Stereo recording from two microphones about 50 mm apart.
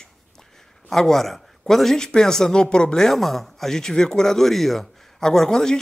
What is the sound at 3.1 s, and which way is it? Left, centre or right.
Speech, centre.